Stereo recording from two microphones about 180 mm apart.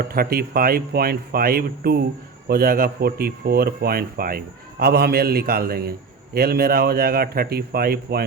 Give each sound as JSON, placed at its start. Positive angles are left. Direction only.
{"t": 0.0, "sound": "a man's voice", "side_deg": -55}